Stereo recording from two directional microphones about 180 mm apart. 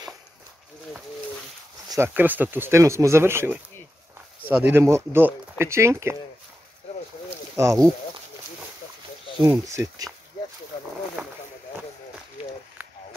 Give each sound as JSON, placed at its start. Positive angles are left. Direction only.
{"t": 1.9, "sound": "speech", "side_deg": -10}
{"t": 7.5, "sound": "speech", "side_deg": -15}
{"t": 9.4, "sound": "speech", "side_deg": -15}